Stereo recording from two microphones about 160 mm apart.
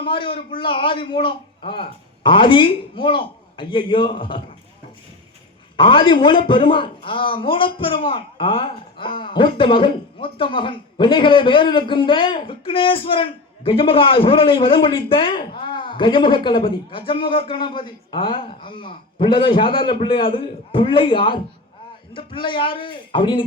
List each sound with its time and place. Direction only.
0.0 s a man's voice: 30° left (ahead or behind)
5.7 s a man's voice: 35° left (ahead or behind)